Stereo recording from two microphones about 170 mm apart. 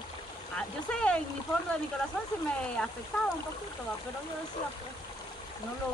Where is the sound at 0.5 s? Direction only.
5° left (ahead or behind).